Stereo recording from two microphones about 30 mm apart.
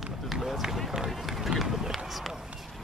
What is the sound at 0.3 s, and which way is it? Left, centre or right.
Run, centre.